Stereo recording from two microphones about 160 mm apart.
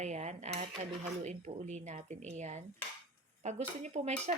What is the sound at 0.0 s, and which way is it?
Cutlery, 45° right (ahead or behind).